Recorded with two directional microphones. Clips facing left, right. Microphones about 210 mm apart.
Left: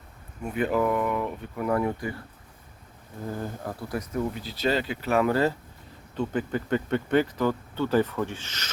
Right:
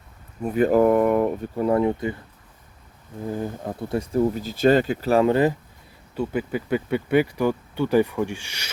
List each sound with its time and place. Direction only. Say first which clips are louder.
0.4 s speech: right 7 dB; 40° right (ahead or behind)
1.5 s speech: right 4 dB; 25° right (ahead or behind)
3.3 s speech: right 5 dB; 20° right (ahead or behind)